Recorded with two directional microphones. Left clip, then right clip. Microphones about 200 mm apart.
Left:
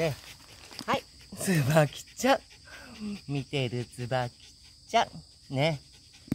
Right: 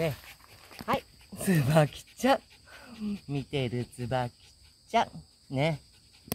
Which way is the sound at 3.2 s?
15° right (ahead or behind).